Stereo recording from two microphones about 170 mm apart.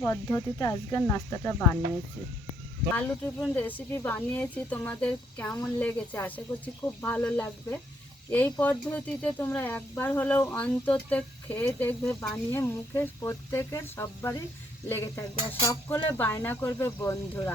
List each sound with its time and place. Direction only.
0.0 s speech: 15° left (ahead or behind)
2.9 s speech: 10° left (ahead or behind)
15.6 s a sound: 25° left (ahead or behind)
16.1 s speech: 10° left (ahead or behind)